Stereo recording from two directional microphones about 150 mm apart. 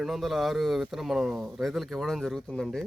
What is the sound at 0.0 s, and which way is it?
Speech, centre (ahead or behind).